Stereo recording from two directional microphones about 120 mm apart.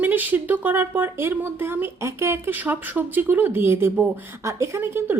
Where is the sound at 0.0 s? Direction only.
15° right (ahead or behind).